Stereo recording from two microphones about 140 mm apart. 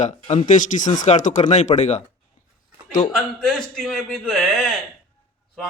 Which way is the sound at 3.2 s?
5° left (ahead or behind).